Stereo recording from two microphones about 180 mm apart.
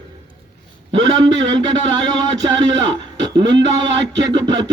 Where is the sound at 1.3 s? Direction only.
90° right.